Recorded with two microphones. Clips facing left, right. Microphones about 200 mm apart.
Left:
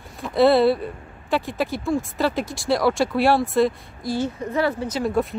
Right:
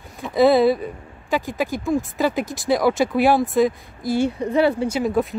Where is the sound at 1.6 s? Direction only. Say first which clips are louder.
Right 1 dB; 15° right (ahead or behind).